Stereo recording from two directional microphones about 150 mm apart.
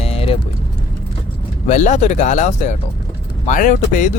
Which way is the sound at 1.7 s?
55° left (ahead or behind).